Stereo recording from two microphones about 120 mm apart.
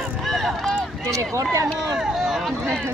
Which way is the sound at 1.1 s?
25° right (ahead or behind).